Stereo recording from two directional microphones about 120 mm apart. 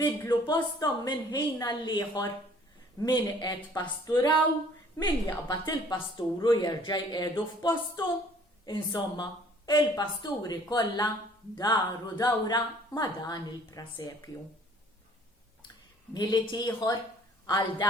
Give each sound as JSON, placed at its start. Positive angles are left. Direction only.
{"t": 0.3, "sound": "speech", "side_deg": 35}
{"t": 13.9, "sound": "speech", "side_deg": 25}
{"t": 16.1, "sound": "a woman's voice", "side_deg": 35}